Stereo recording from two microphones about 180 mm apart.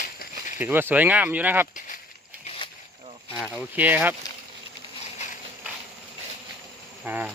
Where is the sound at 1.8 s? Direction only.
50° left (ahead or behind).